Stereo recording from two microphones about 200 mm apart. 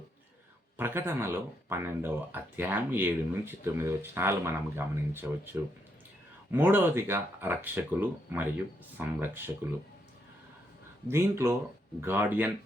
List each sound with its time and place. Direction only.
0.8 s speech: 10° right (ahead or behind)
11.1 s speech: 15° right (ahead or behind)